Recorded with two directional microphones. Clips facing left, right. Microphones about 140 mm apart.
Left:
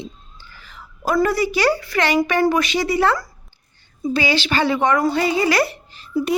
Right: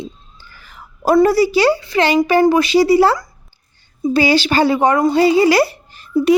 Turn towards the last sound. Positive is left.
turn(degrees=-50)  # may be behind; listen again after turning